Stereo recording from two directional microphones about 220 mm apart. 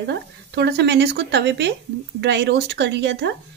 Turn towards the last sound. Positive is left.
turn(degrees=-50)  # may be behind; listen again after turning